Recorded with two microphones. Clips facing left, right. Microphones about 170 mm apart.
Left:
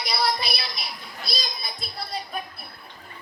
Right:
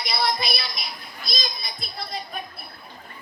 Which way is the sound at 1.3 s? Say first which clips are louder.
Right 1 dB; 35° left (ahead or behind).